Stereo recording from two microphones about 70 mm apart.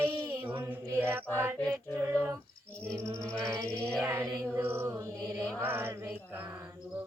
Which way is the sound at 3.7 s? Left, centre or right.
Centre.